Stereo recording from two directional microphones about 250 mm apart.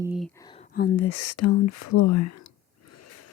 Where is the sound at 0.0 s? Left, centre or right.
Centre.